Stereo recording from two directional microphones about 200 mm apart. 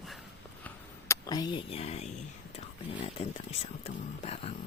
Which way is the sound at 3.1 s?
30° left (ahead or behind).